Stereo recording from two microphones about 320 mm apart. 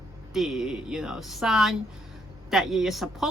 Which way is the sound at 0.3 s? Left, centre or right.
Centre.